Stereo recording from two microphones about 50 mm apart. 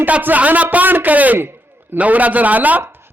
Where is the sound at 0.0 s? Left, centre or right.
Right.